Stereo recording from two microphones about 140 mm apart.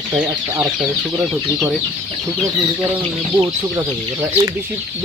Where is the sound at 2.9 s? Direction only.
20° right (ahead or behind).